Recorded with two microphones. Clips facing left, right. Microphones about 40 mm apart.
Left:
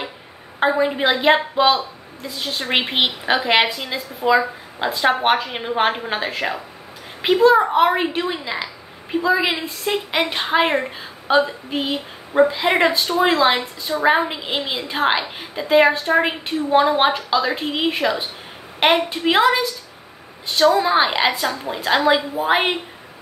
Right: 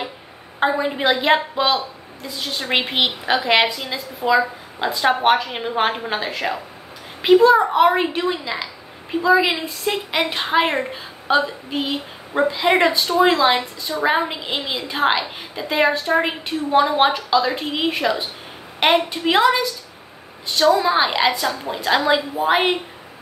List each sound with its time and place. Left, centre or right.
0.6 s a woman's voice: centre
20.8 s a woman's voice: centre